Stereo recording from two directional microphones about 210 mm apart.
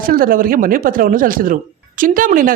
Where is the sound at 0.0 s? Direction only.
45° right (ahead or behind).